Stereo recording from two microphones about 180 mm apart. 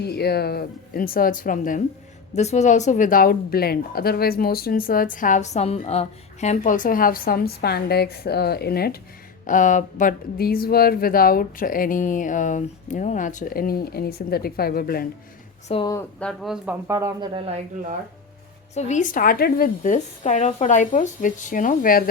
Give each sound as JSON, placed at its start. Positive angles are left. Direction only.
{"t": 0.0, "sound": "speech", "side_deg": 65}
{"t": 9.5, "sound": "speech", "side_deg": 45}
{"t": 15.7, "sound": "a woman's voice", "side_deg": 25}
{"t": 16.0, "sound": "speech", "side_deg": 5}
{"t": 16.8, "sound": "speech", "side_deg": -15}
{"t": 17.2, "sound": "speech", "side_deg": -30}
{"t": 18.7, "sound": "speech", "side_deg": 40}